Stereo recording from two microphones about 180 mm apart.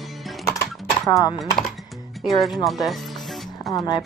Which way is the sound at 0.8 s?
Centre (ahead or behind).